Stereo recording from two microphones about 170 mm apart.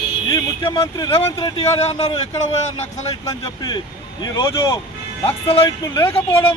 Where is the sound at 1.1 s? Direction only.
35° left (ahead or behind).